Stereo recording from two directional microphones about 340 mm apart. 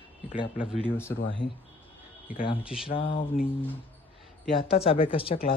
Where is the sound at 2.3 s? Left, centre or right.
Centre.